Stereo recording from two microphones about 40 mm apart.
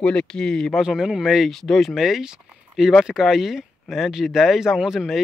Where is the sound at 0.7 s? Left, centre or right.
Centre.